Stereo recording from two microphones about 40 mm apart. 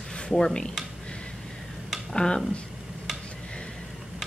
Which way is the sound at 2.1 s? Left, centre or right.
Centre.